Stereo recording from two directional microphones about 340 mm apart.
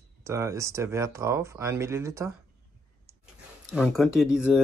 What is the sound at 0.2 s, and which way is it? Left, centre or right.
Speech, centre.